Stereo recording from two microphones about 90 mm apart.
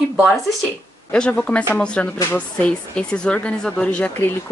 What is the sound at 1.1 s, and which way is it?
Speech, 10° left (ahead or behind).